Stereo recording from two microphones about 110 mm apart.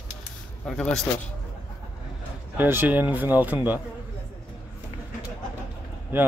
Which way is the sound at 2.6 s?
20° right (ahead or behind).